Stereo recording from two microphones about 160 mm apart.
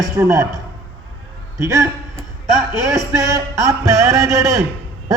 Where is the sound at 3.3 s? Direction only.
20° right (ahead or behind).